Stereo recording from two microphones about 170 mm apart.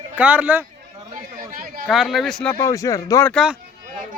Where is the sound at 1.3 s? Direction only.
55° right (ahead or behind).